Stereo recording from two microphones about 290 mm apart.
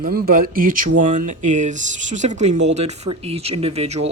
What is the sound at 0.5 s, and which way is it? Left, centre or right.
Speech, right.